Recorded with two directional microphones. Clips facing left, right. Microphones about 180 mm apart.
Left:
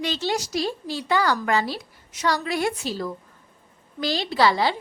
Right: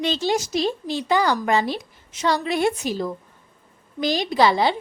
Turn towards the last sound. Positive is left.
turn(degrees=-20)  # may be behind; listen again after turning